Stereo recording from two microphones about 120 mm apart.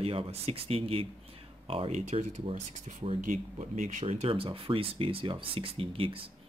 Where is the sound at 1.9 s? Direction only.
70° right (ahead or behind).